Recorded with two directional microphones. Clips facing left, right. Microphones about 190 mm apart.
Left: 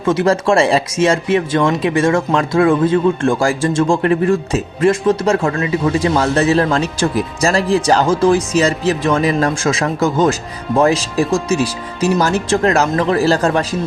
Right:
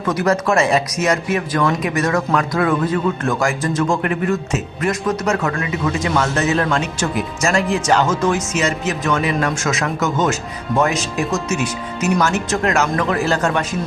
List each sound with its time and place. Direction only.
0.0 s speech: 25° left (ahead or behind)